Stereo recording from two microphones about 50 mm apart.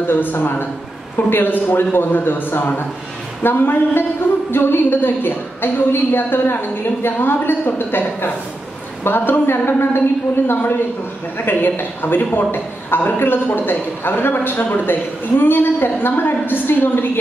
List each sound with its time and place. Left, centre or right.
0.0 s a woman's voice: left